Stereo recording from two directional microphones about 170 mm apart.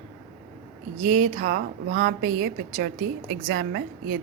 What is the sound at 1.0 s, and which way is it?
A woman's voice, 50° right (ahead or behind).